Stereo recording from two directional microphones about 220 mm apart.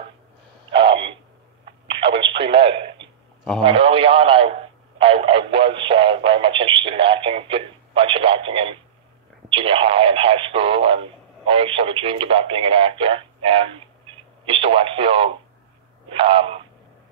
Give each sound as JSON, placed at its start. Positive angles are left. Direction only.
{"t": 2.1, "sound": "radio", "side_deg": -25}
{"t": 3.6, "sound": "speech", "side_deg": -25}